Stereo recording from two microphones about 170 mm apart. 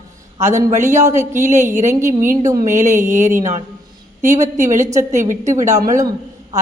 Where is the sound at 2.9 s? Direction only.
15° right (ahead or behind).